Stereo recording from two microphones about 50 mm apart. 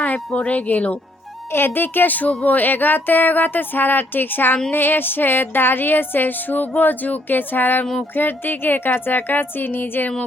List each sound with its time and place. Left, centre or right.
0.3 s speech: left
1.5 s music: left
2.4 s speech: left
4.7 s music: left
8.1 s speech: left